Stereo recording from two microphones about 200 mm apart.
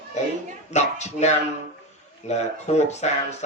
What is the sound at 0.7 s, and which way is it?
Speech, 35° left (ahead or behind).